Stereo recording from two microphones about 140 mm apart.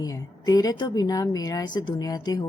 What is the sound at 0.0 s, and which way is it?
A woman's voice, 25° left (ahead or behind).